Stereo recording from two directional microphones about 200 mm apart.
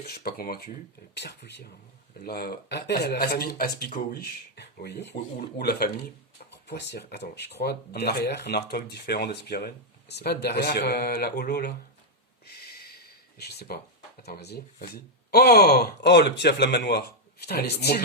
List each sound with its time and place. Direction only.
0.2 s speech: 45° left (ahead or behind)
13.4 s speech: 55° left (ahead or behind)